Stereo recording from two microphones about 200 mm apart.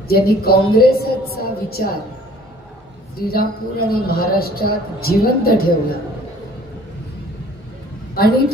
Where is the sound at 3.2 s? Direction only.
50° left (ahead or behind).